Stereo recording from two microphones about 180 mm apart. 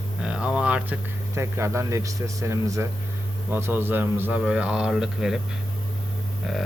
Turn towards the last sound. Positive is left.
turn(degrees=0)  # may be behind; listen again after turning